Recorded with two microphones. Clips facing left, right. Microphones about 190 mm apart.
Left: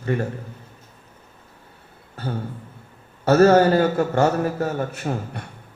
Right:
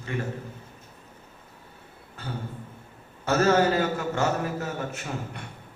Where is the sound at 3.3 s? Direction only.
45° left (ahead or behind).